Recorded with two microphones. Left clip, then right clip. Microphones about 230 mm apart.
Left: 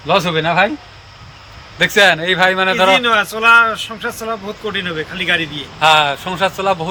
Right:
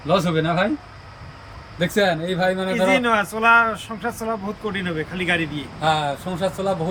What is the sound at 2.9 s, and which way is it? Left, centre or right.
Speech, centre.